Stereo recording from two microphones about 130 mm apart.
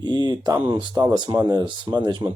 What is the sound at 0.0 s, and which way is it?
Speech, 35° right (ahead or behind).